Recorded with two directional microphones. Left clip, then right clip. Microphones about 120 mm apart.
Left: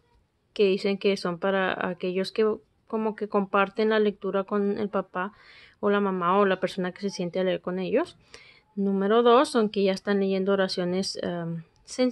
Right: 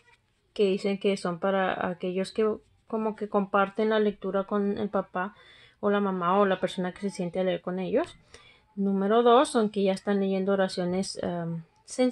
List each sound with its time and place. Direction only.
0.5 s speech: 45° left (ahead or behind)
4.9 s speech: 35° left (ahead or behind)